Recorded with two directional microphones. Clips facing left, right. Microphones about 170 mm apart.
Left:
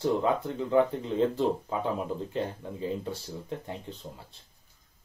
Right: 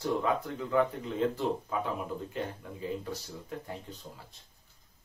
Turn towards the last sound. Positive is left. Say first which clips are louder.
# left 2 dB
turn(degrees=25)  # may be behind; listen again after turning